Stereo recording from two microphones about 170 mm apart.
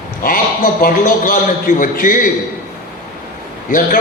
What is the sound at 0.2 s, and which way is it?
A man's voice, 55° left (ahead or behind).